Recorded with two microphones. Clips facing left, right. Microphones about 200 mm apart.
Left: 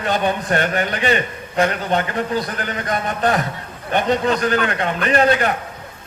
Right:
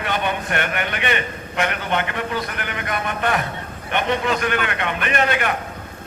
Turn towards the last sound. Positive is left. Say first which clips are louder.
# left 5 dB
turn(degrees=35)  # may be behind; listen again after turning